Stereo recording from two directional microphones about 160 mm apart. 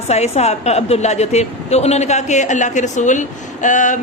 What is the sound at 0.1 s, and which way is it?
A man's voice, 40° left (ahead or behind).